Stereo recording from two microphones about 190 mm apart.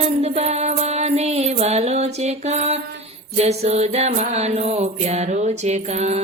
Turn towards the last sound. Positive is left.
turn(degrees=-35)  # may be behind; listen again after turning